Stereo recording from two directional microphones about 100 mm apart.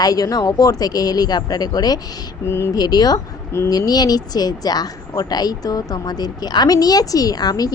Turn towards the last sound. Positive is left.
turn(degrees=40)  # may be behind; listen again after turning